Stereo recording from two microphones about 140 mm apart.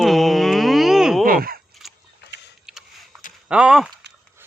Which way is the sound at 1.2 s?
90° right.